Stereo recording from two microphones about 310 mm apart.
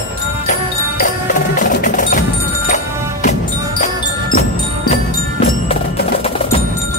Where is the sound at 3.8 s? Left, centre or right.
Left.